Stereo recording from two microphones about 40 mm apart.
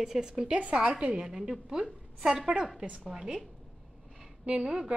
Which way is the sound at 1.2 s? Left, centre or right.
Centre.